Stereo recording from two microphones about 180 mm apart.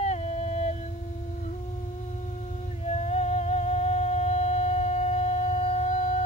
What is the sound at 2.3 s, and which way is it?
Music, 40° left (ahead or behind).